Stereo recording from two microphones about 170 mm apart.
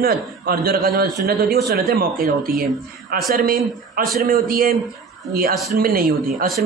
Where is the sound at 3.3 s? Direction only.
55° right (ahead or behind).